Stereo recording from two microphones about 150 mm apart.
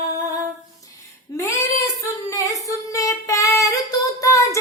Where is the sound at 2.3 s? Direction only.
20° left (ahead or behind).